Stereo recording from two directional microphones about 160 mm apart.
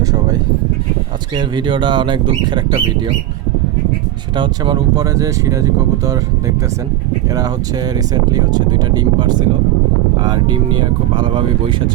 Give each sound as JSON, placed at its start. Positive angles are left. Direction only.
{"t": 1.4, "sound": "speech", "side_deg": -30}
{"t": 4.4, "sound": "speech", "side_deg": -30}
{"t": 7.9, "sound": "speech", "side_deg": -25}